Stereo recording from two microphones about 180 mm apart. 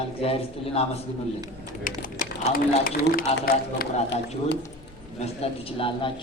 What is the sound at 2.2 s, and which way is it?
Speech, 50° left (ahead or behind).